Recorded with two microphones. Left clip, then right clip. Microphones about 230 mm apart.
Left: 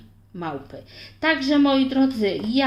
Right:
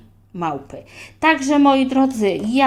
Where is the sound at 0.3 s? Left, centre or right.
Right.